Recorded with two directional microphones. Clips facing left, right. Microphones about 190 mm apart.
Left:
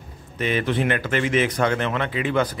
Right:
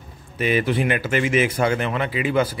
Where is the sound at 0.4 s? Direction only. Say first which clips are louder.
Right 2 dB; 10° right (ahead or behind).